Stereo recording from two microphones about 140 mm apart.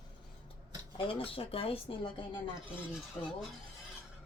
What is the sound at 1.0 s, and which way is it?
Speech, 40° left (ahead or behind).